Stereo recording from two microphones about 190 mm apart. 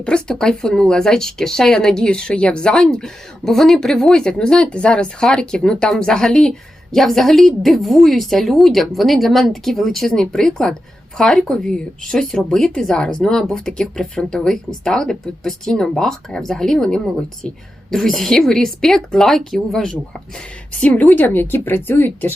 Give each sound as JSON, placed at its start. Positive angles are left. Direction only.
{"t": 0.0, "sound": "speech", "side_deg": 5}